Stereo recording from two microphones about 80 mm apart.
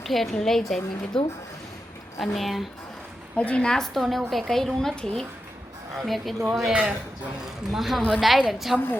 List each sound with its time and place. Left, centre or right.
0.0 s a woman's voice: centre
3.3 s a woman's voice: centre